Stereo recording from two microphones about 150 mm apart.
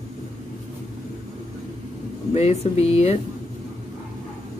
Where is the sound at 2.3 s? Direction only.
45° left (ahead or behind).